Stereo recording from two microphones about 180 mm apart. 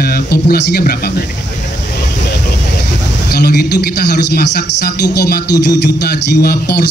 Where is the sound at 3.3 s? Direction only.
65° left (ahead or behind).